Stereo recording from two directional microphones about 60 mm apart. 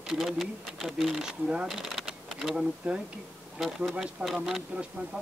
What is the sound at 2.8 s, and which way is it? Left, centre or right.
Speech, right.